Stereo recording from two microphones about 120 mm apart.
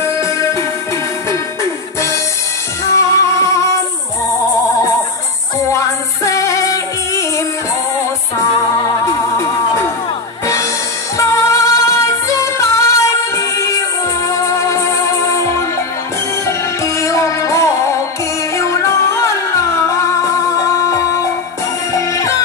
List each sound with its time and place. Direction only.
0.2 s music: 25° left (ahead or behind)
2.9 s music: 25° left (ahead or behind)
6.2 s music: 25° left (ahead or behind)
11.1 s music: 25° left (ahead or behind)